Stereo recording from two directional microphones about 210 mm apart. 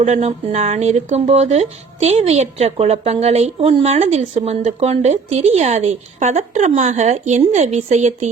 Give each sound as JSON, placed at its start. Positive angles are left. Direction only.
{"t": 0.0, "sound": "speech", "side_deg": -30}